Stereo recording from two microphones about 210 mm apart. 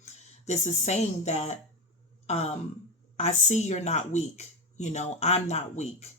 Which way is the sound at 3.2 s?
30° left (ahead or behind).